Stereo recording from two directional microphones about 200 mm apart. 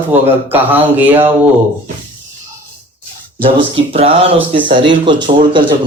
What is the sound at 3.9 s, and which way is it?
Speech, 30° right (ahead or behind).